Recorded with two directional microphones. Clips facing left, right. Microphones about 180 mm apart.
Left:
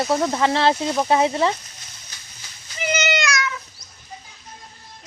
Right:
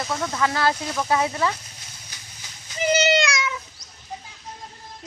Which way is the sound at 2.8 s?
35° right (ahead or behind).